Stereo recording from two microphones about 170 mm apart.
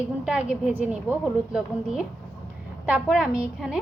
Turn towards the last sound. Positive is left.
turn(degrees=-5)  # may be behind; listen again after turning